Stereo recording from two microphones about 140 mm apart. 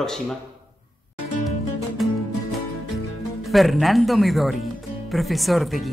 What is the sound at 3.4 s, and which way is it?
A man's voice, centre (ahead or behind).